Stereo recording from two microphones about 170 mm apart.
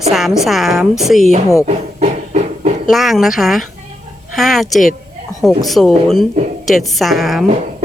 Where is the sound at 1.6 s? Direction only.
40° right (ahead or behind).